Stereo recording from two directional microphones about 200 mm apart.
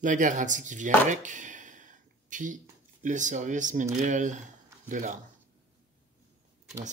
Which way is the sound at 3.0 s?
40° right (ahead or behind).